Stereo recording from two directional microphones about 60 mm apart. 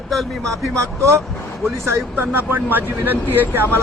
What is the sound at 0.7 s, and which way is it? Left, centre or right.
Speech, right.